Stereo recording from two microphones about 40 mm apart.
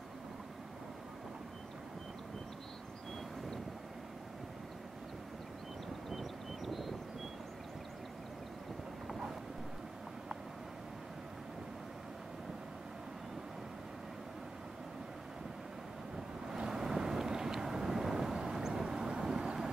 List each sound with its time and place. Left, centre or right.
6.0 s a sound: centre
9.1 s boat: centre
16.4 s vehicle: centre